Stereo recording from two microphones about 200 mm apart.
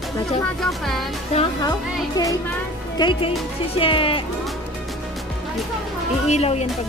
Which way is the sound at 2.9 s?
20° left (ahead or behind).